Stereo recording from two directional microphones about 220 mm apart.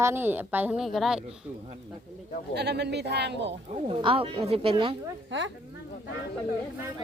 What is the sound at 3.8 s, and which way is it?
Speech, 25° right (ahead or behind).